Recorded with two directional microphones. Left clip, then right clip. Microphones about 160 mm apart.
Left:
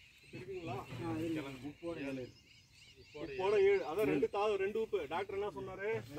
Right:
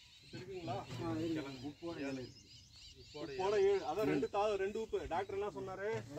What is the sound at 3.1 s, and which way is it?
Speech, centre (ahead or behind).